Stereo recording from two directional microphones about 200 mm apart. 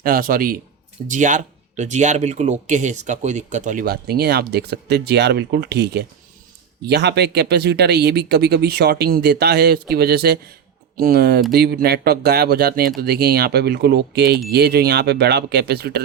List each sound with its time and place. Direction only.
0.0 s speech: 45° right (ahead or behind)